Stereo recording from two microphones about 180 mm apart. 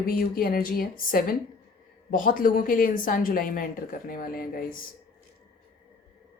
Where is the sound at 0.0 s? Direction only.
55° left (ahead or behind).